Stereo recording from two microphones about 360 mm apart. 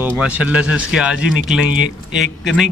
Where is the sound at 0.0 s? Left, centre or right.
Centre.